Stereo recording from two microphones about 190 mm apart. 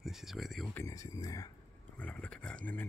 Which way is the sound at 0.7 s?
15° left (ahead or behind).